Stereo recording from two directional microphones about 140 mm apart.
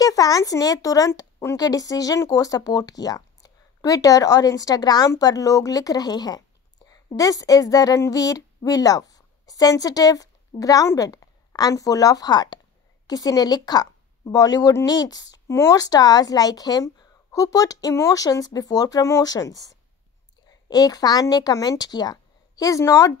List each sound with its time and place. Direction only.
0.0 s a woman's voice: 25° left (ahead or behind)